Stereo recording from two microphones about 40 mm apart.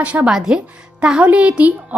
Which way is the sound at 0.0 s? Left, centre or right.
Right.